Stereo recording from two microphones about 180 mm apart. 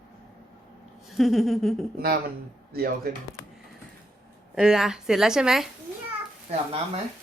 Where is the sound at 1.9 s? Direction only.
60° right (ahead or behind).